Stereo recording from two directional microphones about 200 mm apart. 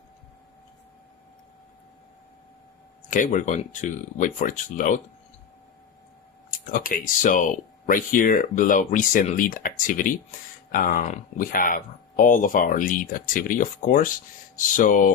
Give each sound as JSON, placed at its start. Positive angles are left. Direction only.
{"t": 3.1, "sound": "speech", "side_deg": 40}
{"t": 6.5, "sound": "speech", "side_deg": 40}